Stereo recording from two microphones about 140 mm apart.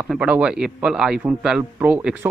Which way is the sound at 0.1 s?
5° right (ahead or behind).